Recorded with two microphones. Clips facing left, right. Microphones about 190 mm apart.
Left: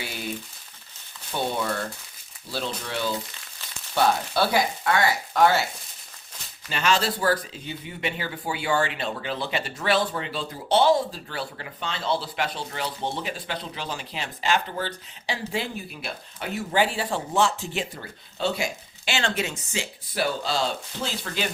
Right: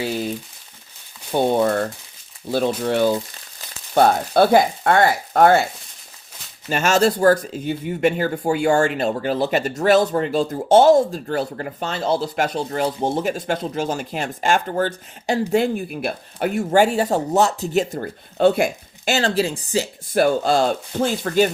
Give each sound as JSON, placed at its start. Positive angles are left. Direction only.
{"t": 0.0, "sound": "speech", "side_deg": -35}
{"t": 1.3, "sound": "speech", "side_deg": -50}
{"t": 6.7, "sound": "speech", "side_deg": -45}